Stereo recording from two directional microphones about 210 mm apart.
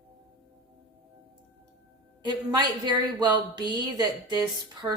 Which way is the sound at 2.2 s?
20° right (ahead or behind).